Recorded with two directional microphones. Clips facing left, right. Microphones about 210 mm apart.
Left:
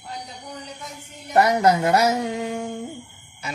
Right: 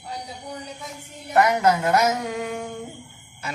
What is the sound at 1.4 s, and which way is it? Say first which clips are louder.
Speech: left 1 dB; 35° left (ahead or behind).